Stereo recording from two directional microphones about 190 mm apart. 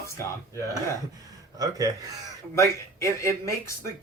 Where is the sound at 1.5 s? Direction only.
20° right (ahead or behind).